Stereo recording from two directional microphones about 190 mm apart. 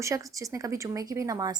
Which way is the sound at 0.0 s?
15° right (ahead or behind).